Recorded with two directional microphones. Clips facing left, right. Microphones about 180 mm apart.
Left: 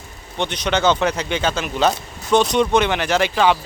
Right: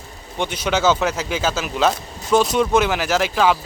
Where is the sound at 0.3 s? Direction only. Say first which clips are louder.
Even; 5° right (ahead or behind).